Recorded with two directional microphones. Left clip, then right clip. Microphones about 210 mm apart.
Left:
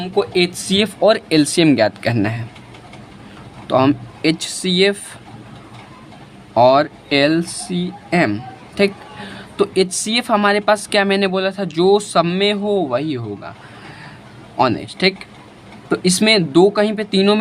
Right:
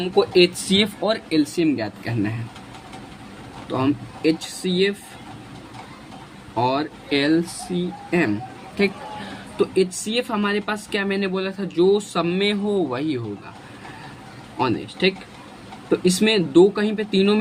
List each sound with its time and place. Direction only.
0.0 s speech: 20° left (ahead or behind); by 2.3 s 45° left (ahead or behind)
3.7 s speech: 45° left (ahead or behind)
6.6 s speech: 45° left (ahead or behind)
9.6 s speech: 40° left (ahead or behind)
14.6 s speech: 40° left (ahead or behind)